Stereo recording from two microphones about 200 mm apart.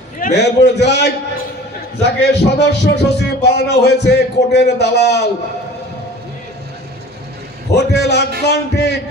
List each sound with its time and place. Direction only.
0.2 s a man's voice: 55° left (ahead or behind)
7.7 s a man's voice: 55° left (ahead or behind)